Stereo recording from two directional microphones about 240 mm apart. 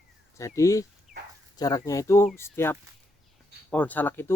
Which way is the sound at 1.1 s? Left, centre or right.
Centre.